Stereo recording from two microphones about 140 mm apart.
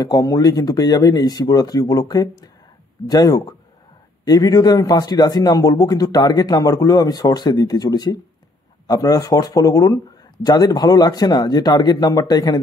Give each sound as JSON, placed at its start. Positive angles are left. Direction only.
{"t": 0.0, "sound": "speech", "side_deg": 25}